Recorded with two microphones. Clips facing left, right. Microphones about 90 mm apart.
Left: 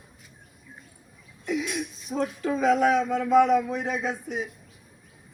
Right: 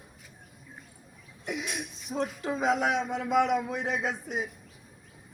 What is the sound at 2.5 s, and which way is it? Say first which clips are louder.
A man's voice: left 6 dB; 20° right (ahead or behind).